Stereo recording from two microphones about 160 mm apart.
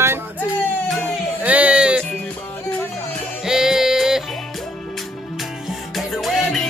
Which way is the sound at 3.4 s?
5° right (ahead or behind).